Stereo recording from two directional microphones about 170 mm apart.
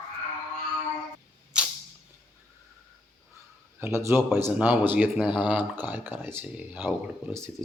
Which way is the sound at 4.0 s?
15° right (ahead or behind).